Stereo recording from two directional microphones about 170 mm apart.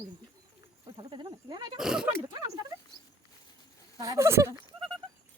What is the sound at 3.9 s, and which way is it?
Speech, 20° right (ahead or behind).